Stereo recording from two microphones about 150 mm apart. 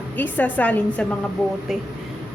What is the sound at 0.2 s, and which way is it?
Speech, 10° left (ahead or behind).